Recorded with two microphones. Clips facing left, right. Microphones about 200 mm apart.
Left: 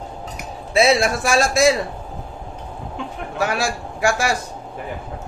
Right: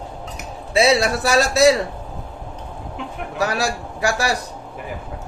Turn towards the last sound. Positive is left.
turn(degrees=-35)  # may be behind; listen again after turning